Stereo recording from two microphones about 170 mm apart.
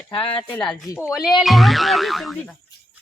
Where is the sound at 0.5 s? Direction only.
5° left (ahead or behind).